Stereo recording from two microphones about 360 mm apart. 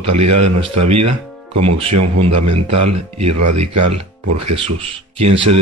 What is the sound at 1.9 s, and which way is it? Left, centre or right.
Speech, right.